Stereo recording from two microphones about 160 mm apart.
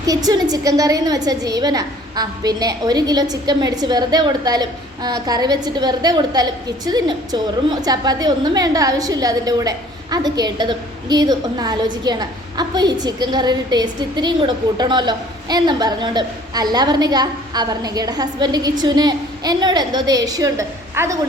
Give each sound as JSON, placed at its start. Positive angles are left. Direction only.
{"t": 0.0, "sound": "a woman's voice", "side_deg": -25}